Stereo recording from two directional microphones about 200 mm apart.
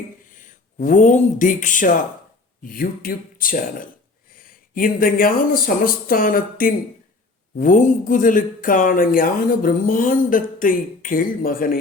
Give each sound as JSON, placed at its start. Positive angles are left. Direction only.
{"t": 0.3, "sound": "speech", "side_deg": 40}